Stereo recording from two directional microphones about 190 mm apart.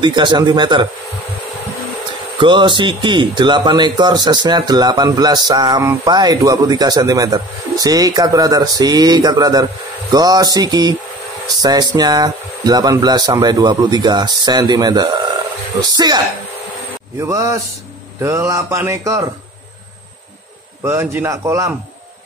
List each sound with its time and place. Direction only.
0.0 s speech: 25° right (ahead or behind)
2.3 s speech: 25° right (ahead or behind)
17.2 s mantra: 15° right (ahead or behind)
20.8 s mantra: 10° right (ahead or behind)